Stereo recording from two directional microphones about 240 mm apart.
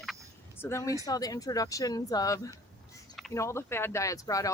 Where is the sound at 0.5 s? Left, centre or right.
Centre.